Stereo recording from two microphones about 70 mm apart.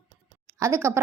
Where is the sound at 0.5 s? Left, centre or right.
Right.